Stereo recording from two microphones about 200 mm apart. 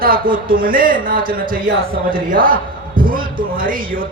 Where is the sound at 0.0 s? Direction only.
45° right (ahead or behind).